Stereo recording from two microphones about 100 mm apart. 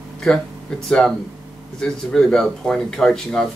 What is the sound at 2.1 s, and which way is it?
Speech, 5° left (ahead or behind).